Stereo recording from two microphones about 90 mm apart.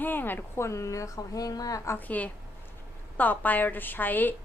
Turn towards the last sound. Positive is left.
turn(degrees=20)  # may be behind; listen again after turning